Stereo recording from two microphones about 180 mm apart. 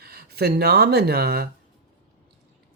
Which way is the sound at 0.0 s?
60° right (ahead or behind).